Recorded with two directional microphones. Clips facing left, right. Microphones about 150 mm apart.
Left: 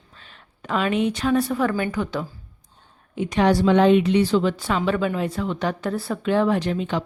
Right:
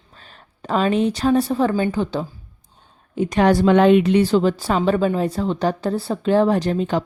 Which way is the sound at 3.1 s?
45° right (ahead or behind).